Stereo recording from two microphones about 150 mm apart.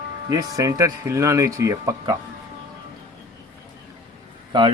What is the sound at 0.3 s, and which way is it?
Speech, 25° right (ahead or behind).